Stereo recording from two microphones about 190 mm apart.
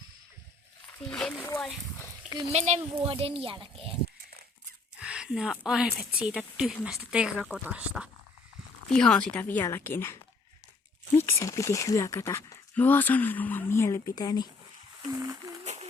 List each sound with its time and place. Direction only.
1.1 s speech: 5° left (ahead or behind)
2.5 s a child's voice: 35° right (ahead or behind)
4.9 s speech: 5° right (ahead or behind); by 10.2 s 10° left (ahead or behind)
11.2 s speech: 15° left (ahead or behind)
15.1 s a sound: 20° right (ahead or behind)
15.6 s a sound: 35° right (ahead or behind)